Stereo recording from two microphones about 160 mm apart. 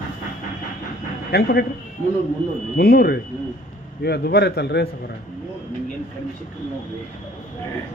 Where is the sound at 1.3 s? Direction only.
75° left (ahead or behind).